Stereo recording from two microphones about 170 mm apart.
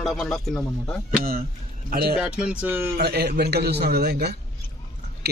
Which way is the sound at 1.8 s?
65° right (ahead or behind).